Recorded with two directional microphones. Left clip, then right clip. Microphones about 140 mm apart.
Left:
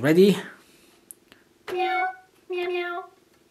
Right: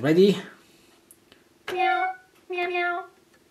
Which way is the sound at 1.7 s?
10° left (ahead or behind).